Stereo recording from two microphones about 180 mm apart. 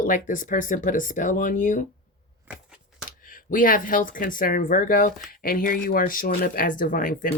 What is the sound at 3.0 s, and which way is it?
Speech, 50° left (ahead or behind).